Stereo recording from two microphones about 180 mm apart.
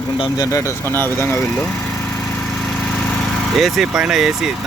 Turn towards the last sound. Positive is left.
turn(degrees=0)  # may be behind; listen again after turning